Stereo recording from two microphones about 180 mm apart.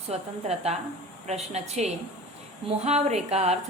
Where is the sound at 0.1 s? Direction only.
35° right (ahead or behind).